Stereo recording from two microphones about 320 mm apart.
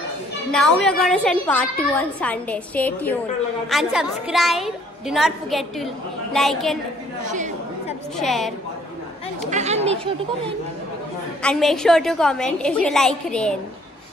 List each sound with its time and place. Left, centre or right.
0.5 s a woman's voice: centre
8.2 s a woman's voice: centre
9.5 s speech: right
11.4 s a woman's voice: centre